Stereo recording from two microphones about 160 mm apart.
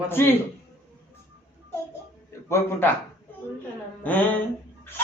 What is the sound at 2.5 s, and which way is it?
Speech, 15° left (ahead or behind).